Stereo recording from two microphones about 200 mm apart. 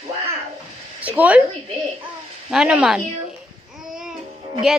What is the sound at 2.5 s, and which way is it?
Speech, 5° right (ahead or behind).